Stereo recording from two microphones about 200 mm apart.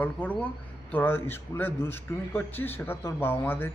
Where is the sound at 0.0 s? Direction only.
10° left (ahead or behind).